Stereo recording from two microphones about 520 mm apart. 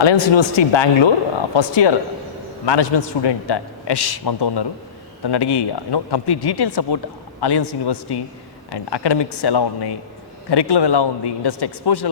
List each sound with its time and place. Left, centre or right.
0.0 s a man's voice: left